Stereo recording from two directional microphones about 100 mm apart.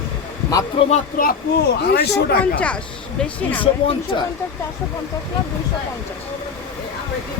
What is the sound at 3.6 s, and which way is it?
Speech, 60° left (ahead or behind).